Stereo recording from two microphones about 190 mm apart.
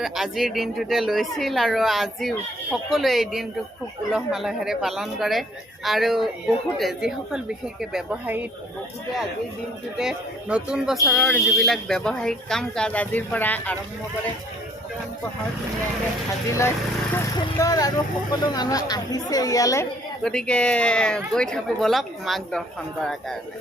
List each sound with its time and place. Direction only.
0.0 s speech: centre (ahead or behind)
10.0 s speech: 5° right (ahead or behind)
16.5 s speech: 15° left (ahead or behind)
20.2 s speech: 5° left (ahead or behind)